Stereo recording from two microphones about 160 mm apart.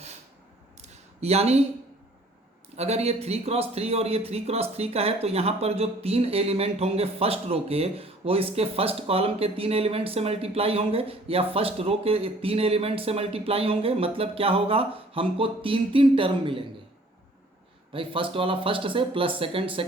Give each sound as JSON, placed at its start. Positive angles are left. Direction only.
{"t": 0.8, "sound": "a sound", "side_deg": -40}
{"t": 2.7, "sound": "a man's voice", "side_deg": -40}
{"t": 17.9, "sound": "a man's voice", "side_deg": -35}